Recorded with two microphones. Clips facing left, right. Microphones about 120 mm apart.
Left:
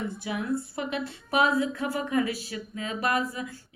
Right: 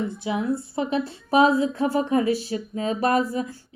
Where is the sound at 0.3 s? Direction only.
25° right (ahead or behind).